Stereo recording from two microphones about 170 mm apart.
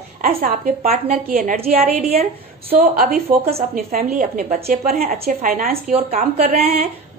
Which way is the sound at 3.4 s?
40° right (ahead or behind).